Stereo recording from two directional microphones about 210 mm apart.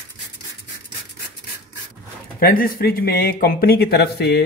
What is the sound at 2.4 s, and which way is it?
Speech, 45° left (ahead or behind).